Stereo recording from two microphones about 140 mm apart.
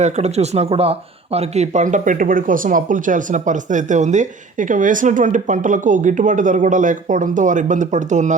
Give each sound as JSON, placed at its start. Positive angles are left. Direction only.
{"t": 0.0, "sound": "speech", "side_deg": -50}